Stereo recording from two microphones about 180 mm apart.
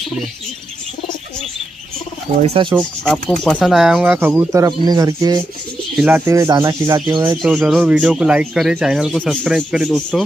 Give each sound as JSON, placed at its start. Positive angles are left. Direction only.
{"t": 2.4, "sound": "speech", "side_deg": -30}
{"t": 3.0, "sound": "speech", "side_deg": 5}
{"t": 7.4, "sound": "speech", "side_deg": 0}